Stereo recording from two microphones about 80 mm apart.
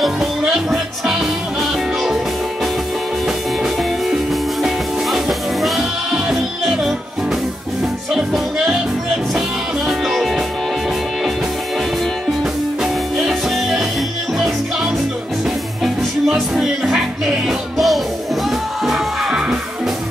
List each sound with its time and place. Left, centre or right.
0.0 s music: centre
3.6 s music: centre
8.1 s music: centre
12.8 s music: centre
15.8 s music: centre